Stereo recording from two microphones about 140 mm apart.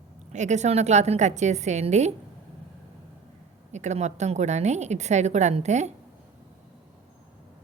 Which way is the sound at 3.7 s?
55° right (ahead or behind).